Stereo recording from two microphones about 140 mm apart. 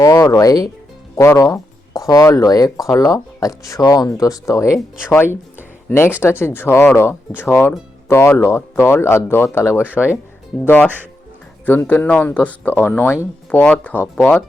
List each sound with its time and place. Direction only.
0.0 s speech: 25° left (ahead or behind)
6.4 s speech: 15° left (ahead or behind)
9.8 s speech: 10° right (ahead or behind)
10.6 s speech: 10° left (ahead or behind)